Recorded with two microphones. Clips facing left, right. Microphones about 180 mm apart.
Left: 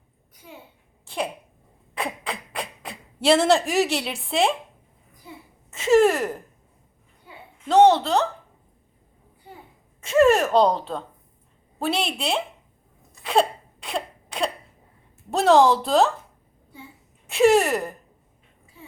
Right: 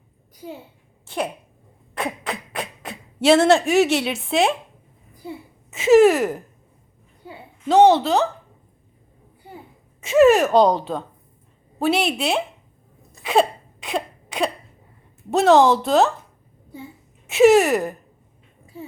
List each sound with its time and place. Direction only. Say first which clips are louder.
1.0 s a sound: right 2 dB; centre (ahead or behind)
2.0 s beatboxing: right 3 dB; centre (ahead or behind)
3.2 s a woman's voice: right 3 dB; centre (ahead or behind)
5.7 s a woman's voice: right 4 dB; 5° right (ahead or behind)
7.7 s a woman's voice: right 2 dB; 5° right (ahead or behind)
10.0 s a woman's voice: right 3 dB; 5° right (ahead or behind)
13.2 s a sound: right 2 dB; 5° right (ahead or behind)
15.3 s a woman's voice: right 2 dB; centre (ahead or behind)
17.2 s a woman's voice: right 4 dB; 5° right (ahead or behind)
18.7 s a sound: right 10 dB; 40° right (ahead or behind)